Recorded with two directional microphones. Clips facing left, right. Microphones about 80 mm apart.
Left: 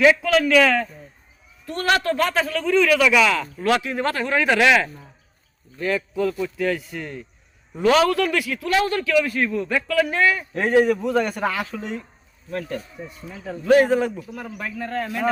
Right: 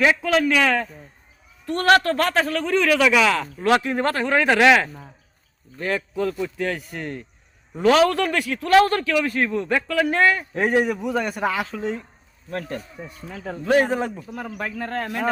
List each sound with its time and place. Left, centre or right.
0.0 s a man's voice: right
1.6 s a man's voice: right
10.5 s a man's voice: centre
10.9 s a man's voice: centre
11.6 s a man's voice: right
12.5 s a man's voice: right
13.3 s a man's voice: right
13.7 s a man's voice: right